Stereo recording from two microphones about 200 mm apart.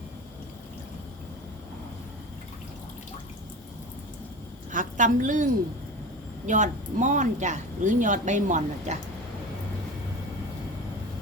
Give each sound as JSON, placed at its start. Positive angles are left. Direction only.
{"t": 4.7, "sound": "a woman's voice", "side_deg": -40}